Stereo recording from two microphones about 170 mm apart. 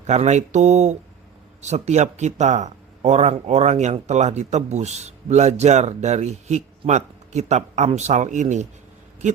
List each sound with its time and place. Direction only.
0.1 s speech: 40° right (ahead or behind)